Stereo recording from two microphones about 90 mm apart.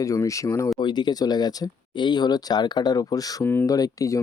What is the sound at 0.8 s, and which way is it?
Speech, 55° left (ahead or behind).